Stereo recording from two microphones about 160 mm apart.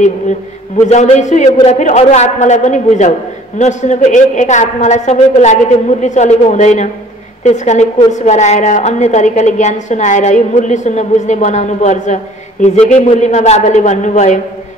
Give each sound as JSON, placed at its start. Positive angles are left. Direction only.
{"t": 0.8, "sound": "a woman's voice", "side_deg": 45}